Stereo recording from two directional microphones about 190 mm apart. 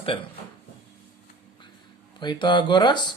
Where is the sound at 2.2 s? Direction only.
25° left (ahead or behind).